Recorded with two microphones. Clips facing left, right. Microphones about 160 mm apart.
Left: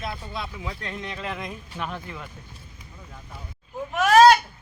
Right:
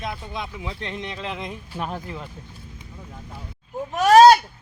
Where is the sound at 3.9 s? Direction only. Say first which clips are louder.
Right 3 dB; 35° right (ahead or behind).